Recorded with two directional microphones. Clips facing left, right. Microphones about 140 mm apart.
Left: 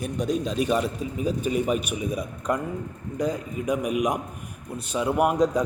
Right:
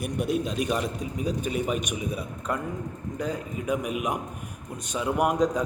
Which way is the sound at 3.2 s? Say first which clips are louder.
Left 4 dB; 10° left (ahead or behind).